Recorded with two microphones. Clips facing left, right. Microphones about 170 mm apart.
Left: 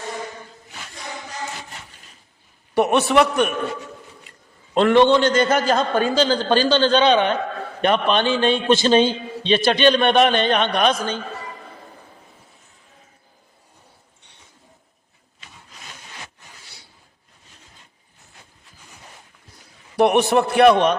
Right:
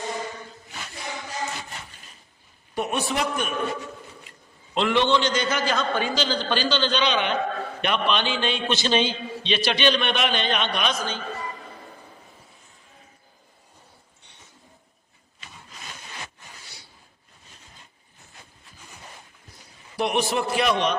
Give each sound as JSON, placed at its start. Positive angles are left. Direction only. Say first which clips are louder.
{"t": 2.7, "sound": "a man's voice", "louder": "left 10 dB", "side_deg": 70}
{"t": 4.7, "sound": "a man's voice", "louder": "left 7 dB", "side_deg": 50}
{"t": 20.0, "sound": "a man's voice", "louder": "left 8 dB", "side_deg": 60}